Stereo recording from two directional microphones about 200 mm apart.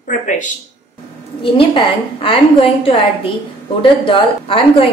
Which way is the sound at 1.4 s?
25° left (ahead or behind).